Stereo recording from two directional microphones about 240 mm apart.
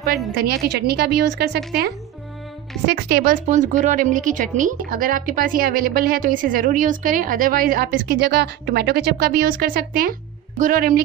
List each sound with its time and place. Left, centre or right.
0.7 s speech: right